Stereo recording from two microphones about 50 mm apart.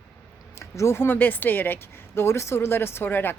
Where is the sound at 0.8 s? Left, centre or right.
Left.